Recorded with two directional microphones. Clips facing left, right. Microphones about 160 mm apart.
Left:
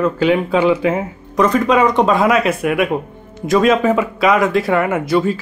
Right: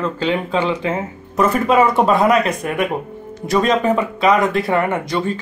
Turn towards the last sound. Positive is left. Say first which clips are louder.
# left 4 dB
turn(degrees=10)  # may be behind; listen again after turning